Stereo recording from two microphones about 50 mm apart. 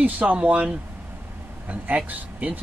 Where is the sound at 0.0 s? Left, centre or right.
Right.